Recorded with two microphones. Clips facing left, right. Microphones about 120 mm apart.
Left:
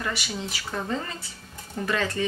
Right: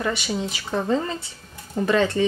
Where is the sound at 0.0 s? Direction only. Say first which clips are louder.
Right 6 dB; 25° right (ahead or behind).